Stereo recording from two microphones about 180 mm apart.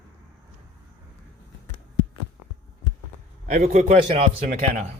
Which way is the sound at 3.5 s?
45° right (ahead or behind).